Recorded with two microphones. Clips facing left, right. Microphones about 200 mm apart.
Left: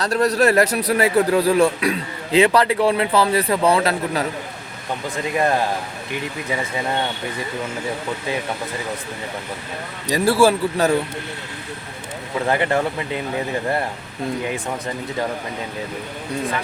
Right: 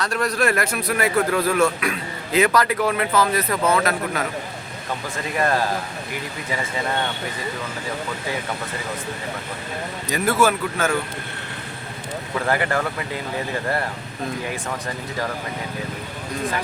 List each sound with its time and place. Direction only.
0.0 s a man's voice: 35° left (ahead or behind)
5.1 s speech: 15° left (ahead or behind)
10.1 s a man's voice: 30° left (ahead or behind)
12.5 s speech: 20° left (ahead or behind)